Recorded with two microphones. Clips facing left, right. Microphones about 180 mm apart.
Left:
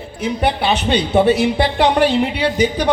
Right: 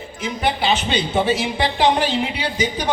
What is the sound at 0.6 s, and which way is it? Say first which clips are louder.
A man's voice: left 3 dB; 60° left (ahead or behind).